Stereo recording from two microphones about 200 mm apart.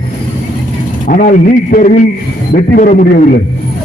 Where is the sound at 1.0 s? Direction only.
40° left (ahead or behind).